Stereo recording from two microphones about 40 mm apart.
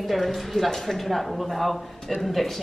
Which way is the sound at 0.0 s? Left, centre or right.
Centre.